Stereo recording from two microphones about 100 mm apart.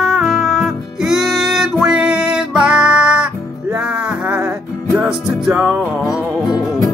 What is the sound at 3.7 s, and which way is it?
Music, 5° right (ahead or behind).